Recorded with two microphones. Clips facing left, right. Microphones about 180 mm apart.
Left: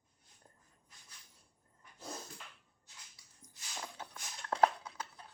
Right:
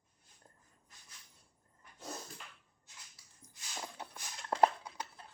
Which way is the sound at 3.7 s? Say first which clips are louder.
Right 1 dB; 10° right (ahead or behind).